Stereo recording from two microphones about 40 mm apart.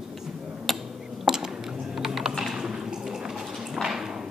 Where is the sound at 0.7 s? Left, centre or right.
Centre.